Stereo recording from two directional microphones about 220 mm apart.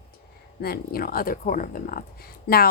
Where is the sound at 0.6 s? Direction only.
45° left (ahead or behind).